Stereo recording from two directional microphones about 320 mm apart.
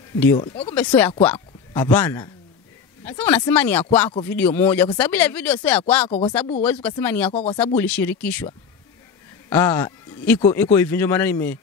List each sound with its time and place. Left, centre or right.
0.2 s speech: centre
0.7 s speech: centre
9.5 s speech: centre